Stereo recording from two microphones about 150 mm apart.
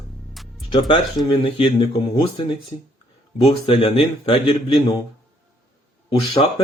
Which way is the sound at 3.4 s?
35° left (ahead or behind).